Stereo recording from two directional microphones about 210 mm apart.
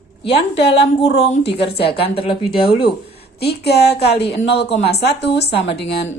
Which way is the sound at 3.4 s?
50° left (ahead or behind).